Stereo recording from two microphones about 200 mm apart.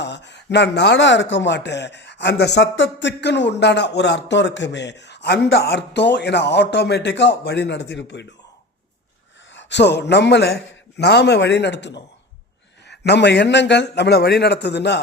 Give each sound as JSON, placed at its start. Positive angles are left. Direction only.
{"t": 0.0, "sound": "speech", "side_deg": 60}
{"t": 9.6, "sound": "speech", "side_deg": 60}